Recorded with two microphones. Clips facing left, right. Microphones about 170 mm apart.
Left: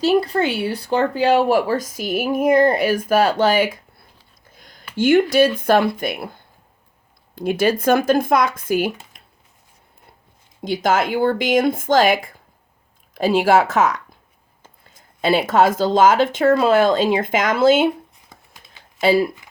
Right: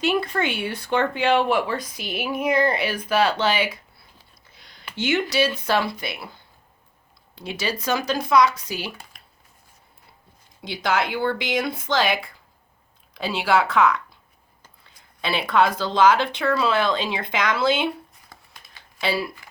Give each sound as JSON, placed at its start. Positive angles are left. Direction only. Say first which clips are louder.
{"t": 0.0, "sound": "speech", "louder": "left 6 dB", "side_deg": 35}
{"t": 4.4, "sound": "a sound", "louder": "left 7 dB", "side_deg": 45}
{"t": 4.9, "sound": "speech", "louder": "left 8 dB", "side_deg": 50}
{"t": 8.9, "sound": "computer keyboard", "louder": "left 8 dB", "side_deg": 20}
{"t": 10.6, "sound": "speech", "louder": "left 5 dB", "side_deg": 45}
{"t": 18.3, "sound": "a sound", "louder": "left 1 dB", "side_deg": 20}
{"t": 18.9, "sound": "speech", "louder": "left 9 dB", "side_deg": 45}